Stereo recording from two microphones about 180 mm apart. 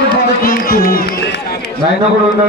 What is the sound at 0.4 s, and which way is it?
Run, 55° left (ahead or behind).